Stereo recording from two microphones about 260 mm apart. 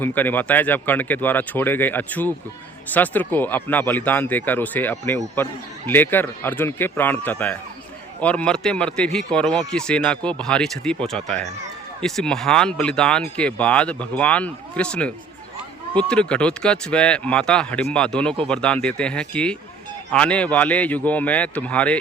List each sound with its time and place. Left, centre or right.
0.0 s speech: centre